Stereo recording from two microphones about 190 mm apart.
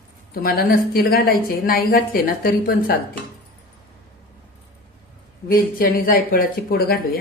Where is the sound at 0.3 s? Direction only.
50° left (ahead or behind).